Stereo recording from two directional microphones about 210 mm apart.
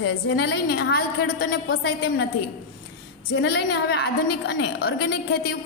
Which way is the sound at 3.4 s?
50° left (ahead or behind).